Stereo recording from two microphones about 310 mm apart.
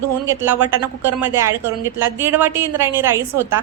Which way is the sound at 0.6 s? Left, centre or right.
Centre.